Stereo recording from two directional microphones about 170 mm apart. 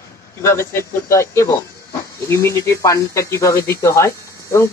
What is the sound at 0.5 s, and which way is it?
Speech, 15° left (ahead or behind).